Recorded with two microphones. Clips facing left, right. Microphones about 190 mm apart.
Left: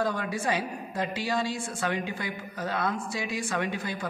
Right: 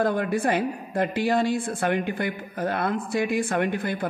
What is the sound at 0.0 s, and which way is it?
A woman's voice, 55° right (ahead or behind).